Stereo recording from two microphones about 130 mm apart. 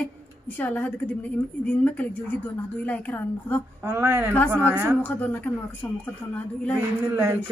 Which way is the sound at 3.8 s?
20° right (ahead or behind).